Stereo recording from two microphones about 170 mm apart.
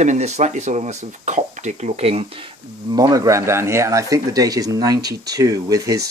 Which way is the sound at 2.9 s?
20° right (ahead or behind).